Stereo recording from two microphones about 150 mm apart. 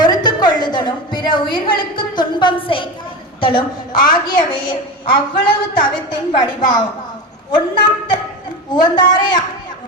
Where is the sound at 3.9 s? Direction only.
70° left (ahead or behind).